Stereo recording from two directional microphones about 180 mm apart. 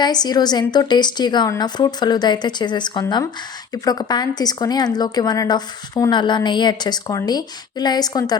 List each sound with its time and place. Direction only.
0.0 s a woman's voice: 20° left (ahead or behind)